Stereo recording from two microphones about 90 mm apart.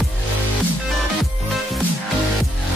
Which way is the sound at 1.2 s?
Centre (ahead or behind).